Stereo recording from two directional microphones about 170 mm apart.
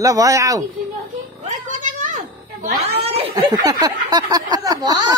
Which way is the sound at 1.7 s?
45° right (ahead or behind).